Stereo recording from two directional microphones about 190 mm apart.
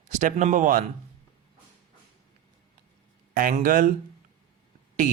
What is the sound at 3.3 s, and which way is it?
Speech, 45° right (ahead or behind).